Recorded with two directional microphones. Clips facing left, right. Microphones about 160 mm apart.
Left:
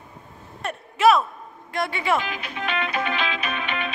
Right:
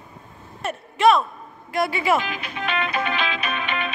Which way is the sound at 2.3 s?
75° right (ahead or behind).